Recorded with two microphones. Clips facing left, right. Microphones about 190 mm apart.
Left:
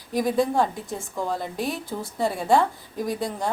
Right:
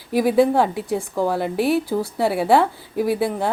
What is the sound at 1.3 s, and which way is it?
A woman's voice, 65° right (ahead or behind).